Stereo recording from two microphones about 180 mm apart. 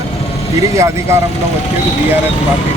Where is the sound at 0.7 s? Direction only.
15° right (ahead or behind).